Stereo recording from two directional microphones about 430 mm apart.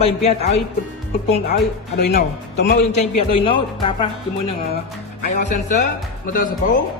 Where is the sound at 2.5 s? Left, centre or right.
Centre.